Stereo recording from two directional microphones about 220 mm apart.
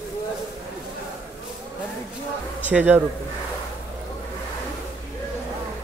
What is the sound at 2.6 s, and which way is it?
Speech, 5° right (ahead or behind).